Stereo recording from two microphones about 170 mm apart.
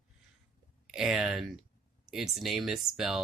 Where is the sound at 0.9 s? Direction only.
Centre (ahead or behind).